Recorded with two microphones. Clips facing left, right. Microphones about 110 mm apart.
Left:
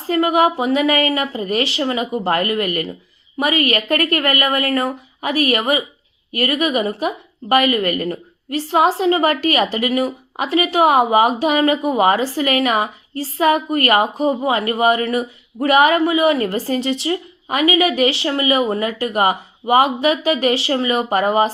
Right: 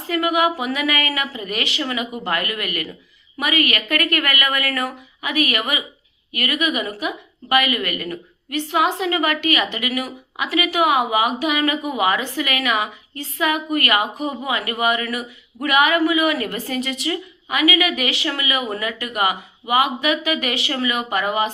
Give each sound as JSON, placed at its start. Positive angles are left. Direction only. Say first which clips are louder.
{"t": 0.0, "sound": "a woman's voice", "louder": "left 4 dB", "side_deg": 35}